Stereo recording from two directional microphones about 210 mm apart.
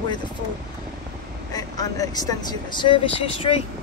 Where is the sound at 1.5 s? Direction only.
20° left (ahead or behind).